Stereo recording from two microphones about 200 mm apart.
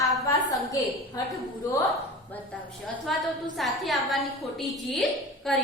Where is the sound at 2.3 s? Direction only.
10° left (ahead or behind).